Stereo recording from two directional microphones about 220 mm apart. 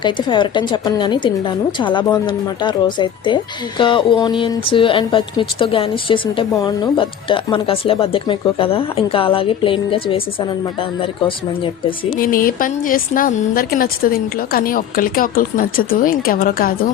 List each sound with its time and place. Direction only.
0.0 s a woman's voice: 20° left (ahead or behind)
12.2 s a woman's voice: 40° left (ahead or behind)